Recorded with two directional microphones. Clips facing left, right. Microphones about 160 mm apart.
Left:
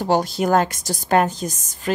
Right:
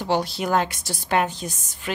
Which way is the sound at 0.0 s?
45° left (ahead or behind).